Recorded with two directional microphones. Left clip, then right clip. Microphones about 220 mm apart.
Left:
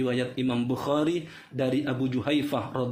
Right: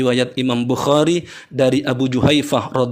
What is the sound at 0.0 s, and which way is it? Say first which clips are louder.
Speech: right 11 dB; 50° right (ahead or behind).